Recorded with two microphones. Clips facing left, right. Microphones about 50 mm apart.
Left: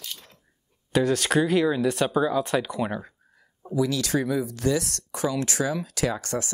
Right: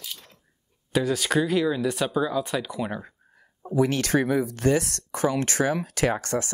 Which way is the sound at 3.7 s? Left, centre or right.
Right.